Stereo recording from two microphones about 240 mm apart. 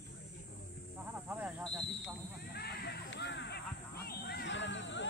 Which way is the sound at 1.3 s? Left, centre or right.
Centre.